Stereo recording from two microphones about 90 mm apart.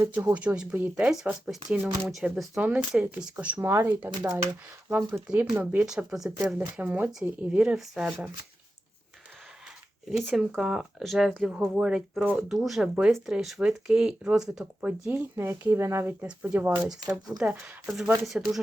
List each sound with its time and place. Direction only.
0.0 s speech: 30° right (ahead or behind)
0.3 s speech: 10° right (ahead or behind)
3.6 s speech: 30° right (ahead or behind)
5.9 s speech: 5° right (ahead or behind)
7.1 s speech: 5° right (ahead or behind)
10.1 s speech: 5° right (ahead or behind)
15.1 s speech: 25° right (ahead or behind)
16.2 s speech: 15° right (ahead or behind)